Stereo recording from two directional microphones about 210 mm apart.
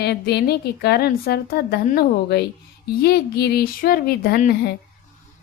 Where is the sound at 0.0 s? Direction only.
50° left (ahead or behind).